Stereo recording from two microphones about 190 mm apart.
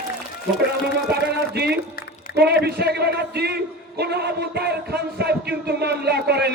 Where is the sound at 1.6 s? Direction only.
60° right (ahead or behind).